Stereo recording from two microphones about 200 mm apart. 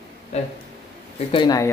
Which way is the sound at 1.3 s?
20° left (ahead or behind).